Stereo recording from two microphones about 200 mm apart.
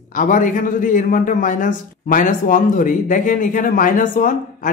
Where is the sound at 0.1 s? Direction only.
40° left (ahead or behind).